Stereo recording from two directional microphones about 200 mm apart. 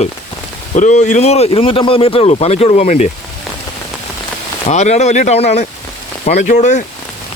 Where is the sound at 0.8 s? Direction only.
35° left (ahead or behind).